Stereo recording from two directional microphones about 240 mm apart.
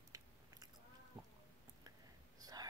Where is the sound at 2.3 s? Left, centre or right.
Centre.